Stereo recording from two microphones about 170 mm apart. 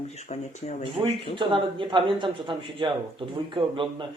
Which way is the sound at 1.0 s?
25° right (ahead or behind).